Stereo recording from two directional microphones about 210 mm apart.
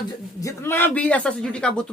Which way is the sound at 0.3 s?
15° left (ahead or behind).